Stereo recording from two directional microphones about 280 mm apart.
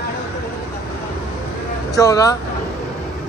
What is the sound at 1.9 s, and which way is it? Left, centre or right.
Speech, centre.